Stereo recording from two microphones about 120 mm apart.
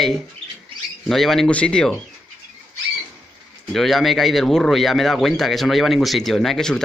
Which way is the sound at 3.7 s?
Centre (ahead or behind).